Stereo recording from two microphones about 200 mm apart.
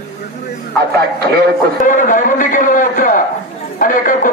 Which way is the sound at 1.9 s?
40° left (ahead or behind).